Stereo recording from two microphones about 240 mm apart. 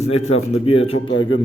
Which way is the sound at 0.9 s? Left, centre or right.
Left.